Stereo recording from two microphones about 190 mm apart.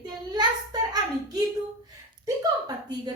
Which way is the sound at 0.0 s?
20° right (ahead or behind).